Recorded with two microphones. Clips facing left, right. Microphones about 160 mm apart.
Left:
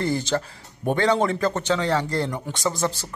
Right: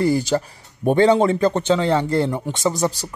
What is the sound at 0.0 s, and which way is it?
A man's voice, 10° right (ahead or behind).